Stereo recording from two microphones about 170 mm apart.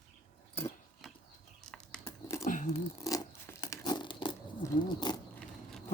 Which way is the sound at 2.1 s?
15° left (ahead or behind).